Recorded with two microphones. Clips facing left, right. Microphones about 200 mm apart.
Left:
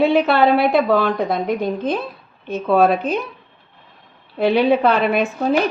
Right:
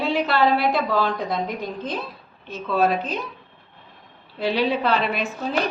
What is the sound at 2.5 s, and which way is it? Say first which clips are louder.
Speech: left 6 dB; 55° left (ahead or behind).